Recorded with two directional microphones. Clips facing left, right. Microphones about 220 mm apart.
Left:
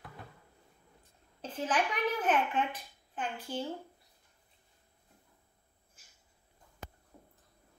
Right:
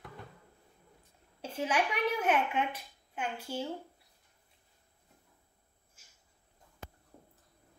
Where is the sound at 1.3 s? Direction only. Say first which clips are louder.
Right 1 dB; 10° right (ahead or behind).